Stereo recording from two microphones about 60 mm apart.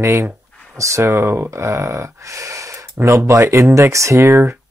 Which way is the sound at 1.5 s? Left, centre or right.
Right.